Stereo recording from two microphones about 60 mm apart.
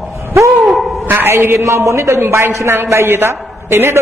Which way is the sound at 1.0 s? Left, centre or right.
Right.